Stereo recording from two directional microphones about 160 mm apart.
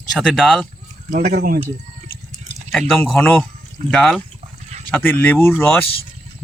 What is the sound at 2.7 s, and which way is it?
Speech, 5° left (ahead or behind).